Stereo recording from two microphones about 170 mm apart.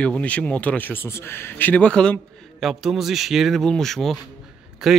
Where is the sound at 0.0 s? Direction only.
5° left (ahead or behind).